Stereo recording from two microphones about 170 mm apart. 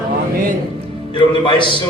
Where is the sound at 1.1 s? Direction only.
30° left (ahead or behind).